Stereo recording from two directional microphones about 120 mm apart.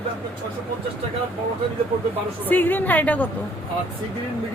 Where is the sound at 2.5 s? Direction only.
15° left (ahead or behind).